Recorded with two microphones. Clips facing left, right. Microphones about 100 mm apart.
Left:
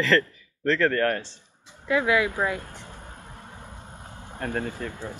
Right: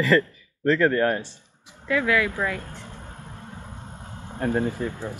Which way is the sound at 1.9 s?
20° left (ahead or behind).